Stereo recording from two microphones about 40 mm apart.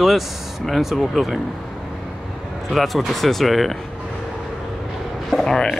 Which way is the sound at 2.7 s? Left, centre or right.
Centre.